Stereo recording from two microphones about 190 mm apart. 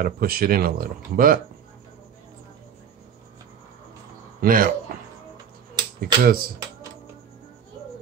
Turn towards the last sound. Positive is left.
turn(degrees=-50)  # may be behind; listen again after turning